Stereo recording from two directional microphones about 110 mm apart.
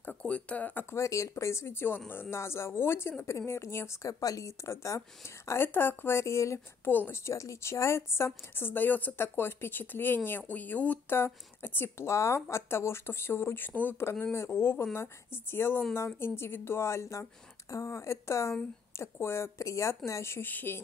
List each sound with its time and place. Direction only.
0.0 s speech: 10° left (ahead or behind)
0.9 s speech: 30° left (ahead or behind)